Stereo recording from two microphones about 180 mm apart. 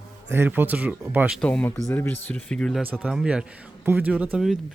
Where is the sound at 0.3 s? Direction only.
10° right (ahead or behind).